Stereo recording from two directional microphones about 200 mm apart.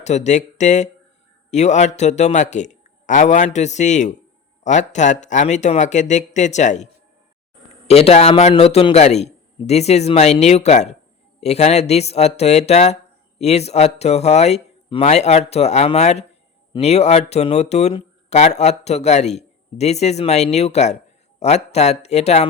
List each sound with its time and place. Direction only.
0.0 s speech: 35° left (ahead or behind)
7.9 s speech: 30° left (ahead or behind)